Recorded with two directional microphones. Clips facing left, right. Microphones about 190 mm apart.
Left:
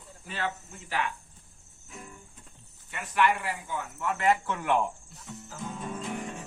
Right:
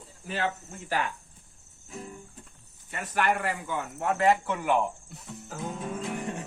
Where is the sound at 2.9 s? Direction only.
40° right (ahead or behind); by 4.2 s 60° right (ahead or behind).